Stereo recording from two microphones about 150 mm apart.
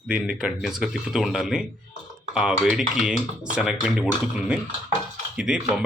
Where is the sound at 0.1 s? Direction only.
5° right (ahead or behind).